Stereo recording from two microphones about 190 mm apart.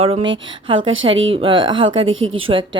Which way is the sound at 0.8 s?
90° right.